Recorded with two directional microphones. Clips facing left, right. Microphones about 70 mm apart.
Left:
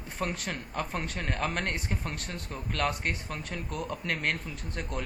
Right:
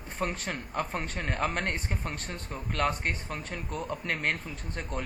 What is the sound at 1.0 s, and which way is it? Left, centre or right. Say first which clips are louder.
Speech: right 1 dB; centre.